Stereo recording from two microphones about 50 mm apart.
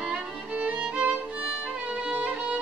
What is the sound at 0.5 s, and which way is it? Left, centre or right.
Music, right.